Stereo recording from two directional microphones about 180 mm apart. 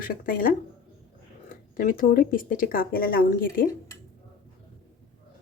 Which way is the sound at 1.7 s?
50° left (ahead or behind).